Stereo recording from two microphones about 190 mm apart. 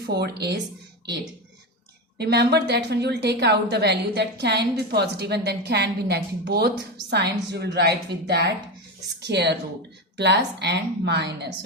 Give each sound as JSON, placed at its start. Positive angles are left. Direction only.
{"t": 0.0, "sound": "a woman's voice", "side_deg": -55}
{"t": 2.1, "sound": "a woman's voice", "side_deg": -60}